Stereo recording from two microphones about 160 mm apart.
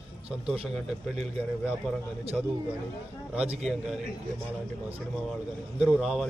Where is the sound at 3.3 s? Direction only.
5° right (ahead or behind).